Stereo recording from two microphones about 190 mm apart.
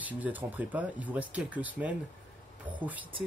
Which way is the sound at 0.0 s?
10° right (ahead or behind).